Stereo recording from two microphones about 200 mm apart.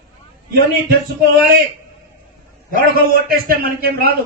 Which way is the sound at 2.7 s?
45° right (ahead or behind).